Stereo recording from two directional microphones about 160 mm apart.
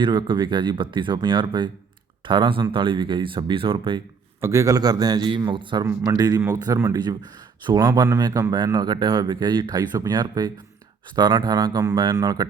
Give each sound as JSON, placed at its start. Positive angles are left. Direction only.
{"t": 0.0, "sound": "speech", "side_deg": -30}
{"t": 4.4, "sound": "speech", "side_deg": -15}